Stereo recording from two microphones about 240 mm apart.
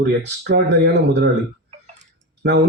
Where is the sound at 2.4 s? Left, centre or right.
Right.